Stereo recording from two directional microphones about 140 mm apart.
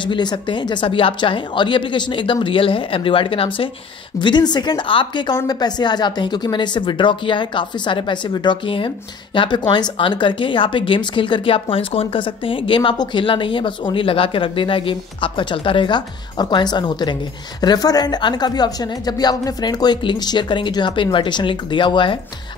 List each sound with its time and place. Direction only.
0.0 s a woman's voice: 35° left (ahead or behind)